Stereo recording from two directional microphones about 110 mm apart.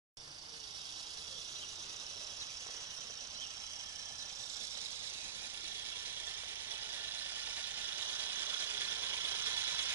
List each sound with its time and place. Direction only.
7.4 s vehicle: 20° right (ahead or behind)